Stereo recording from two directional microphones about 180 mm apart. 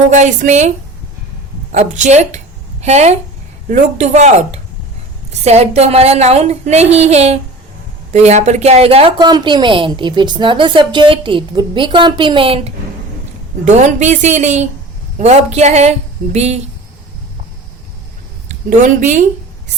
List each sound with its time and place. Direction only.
0.1 s a woman's voice: 40° right (ahead or behind)
1.7 s a woman's voice: 40° right (ahead or behind)
9.1 s a woman's voice: 25° right (ahead or behind)
18.8 s a woman's voice: 45° right (ahead or behind)